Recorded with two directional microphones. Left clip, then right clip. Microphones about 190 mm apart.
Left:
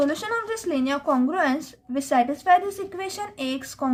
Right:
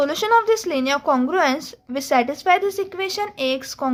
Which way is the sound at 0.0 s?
30° right (ahead or behind).